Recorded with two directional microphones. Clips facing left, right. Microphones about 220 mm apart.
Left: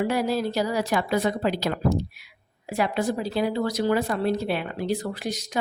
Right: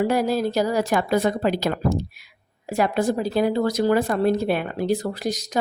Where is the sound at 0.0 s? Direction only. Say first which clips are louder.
Right 3 dB; 45° right (ahead or behind).